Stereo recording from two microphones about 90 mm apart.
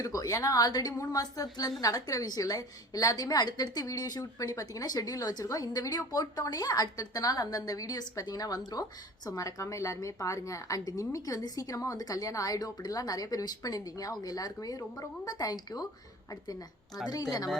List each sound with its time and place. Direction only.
0.0 s a woman's voice: 40° left (ahead or behind)
17.1 s a woman's voice: 45° left (ahead or behind)